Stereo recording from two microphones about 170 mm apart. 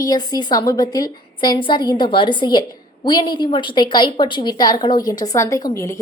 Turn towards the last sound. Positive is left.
turn(degrees=20)  # may be behind; listen again after turning